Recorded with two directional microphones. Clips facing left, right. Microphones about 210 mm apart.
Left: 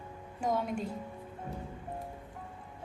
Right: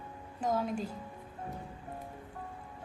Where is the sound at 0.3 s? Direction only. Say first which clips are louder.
Even; centre (ahead or behind).